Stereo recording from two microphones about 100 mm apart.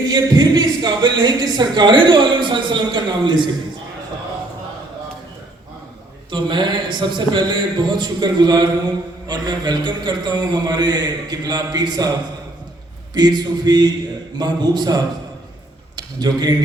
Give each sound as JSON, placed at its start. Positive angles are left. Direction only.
{"t": 0.1, "sound": "speech", "side_deg": -40}
{"t": 6.3, "sound": "speech", "side_deg": -50}
{"t": 13.1, "sound": "speech", "side_deg": -45}